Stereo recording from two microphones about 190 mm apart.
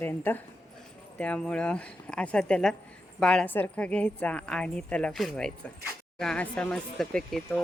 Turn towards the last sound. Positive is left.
turn(degrees=5)  # may be behind; listen again after turning